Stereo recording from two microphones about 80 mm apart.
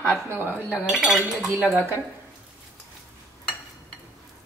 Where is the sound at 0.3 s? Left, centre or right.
Right.